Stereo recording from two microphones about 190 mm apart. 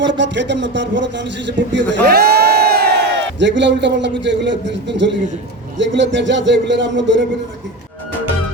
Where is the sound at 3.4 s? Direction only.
70° right (ahead or behind).